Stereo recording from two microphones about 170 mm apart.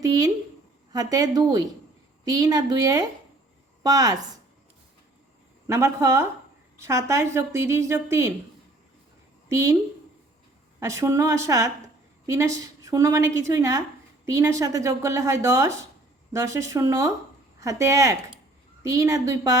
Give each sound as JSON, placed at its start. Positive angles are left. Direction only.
{"t": 0.0, "sound": "a woman's voice", "side_deg": -20}
{"t": 5.6, "sound": "speech", "side_deg": -15}
{"t": 9.5, "sound": "a woman's voice", "side_deg": -20}
{"t": 10.8, "sound": "a woman's voice", "side_deg": -15}